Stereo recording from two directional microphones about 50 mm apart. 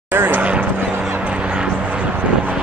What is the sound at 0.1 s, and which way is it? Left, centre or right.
Vehicle, right.